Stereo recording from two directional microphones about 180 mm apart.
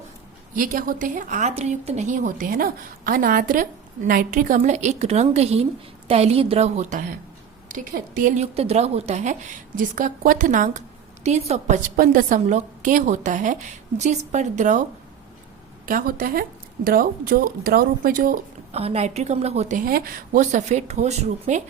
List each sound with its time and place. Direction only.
0.5 s a woman's voice: 50° right (ahead or behind)
11.9 s a woman's voice: 50° right (ahead or behind)
15.9 s a woman's voice: 50° right (ahead or behind)
18.7 s speech: 35° right (ahead or behind)